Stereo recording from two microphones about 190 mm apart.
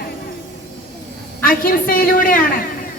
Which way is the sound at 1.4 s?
50° left (ahead or behind).